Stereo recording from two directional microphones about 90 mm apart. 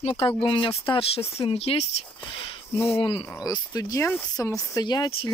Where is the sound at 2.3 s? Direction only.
75° left (ahead or behind).